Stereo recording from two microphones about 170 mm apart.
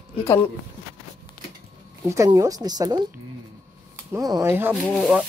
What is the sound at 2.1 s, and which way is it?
Speech, 20° right (ahead or behind).